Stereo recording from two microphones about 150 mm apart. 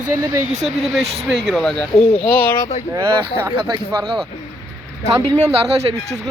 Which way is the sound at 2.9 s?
15° right (ahead or behind).